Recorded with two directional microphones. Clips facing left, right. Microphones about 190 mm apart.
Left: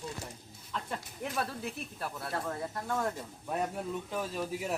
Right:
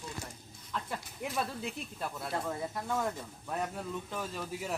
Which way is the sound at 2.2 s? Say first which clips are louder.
Even; 15° right (ahead or behind).